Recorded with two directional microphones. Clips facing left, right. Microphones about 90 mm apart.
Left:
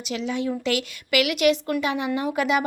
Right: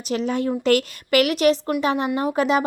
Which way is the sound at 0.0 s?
40° right (ahead or behind).